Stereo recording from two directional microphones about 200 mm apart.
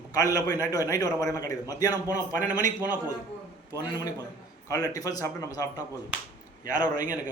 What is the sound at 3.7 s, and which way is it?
A man's voice, 20° left (ahead or behind).